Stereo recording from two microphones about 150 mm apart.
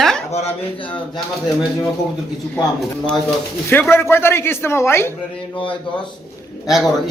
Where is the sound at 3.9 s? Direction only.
15° left (ahead or behind).